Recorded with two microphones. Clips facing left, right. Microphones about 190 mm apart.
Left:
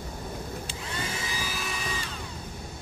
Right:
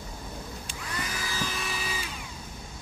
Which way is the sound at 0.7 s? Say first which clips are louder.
Right 2 dB; 25° left (ahead or behind).